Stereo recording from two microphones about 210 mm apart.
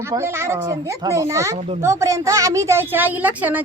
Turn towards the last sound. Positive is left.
turn(degrees=-5)  # may be behind; listen again after turning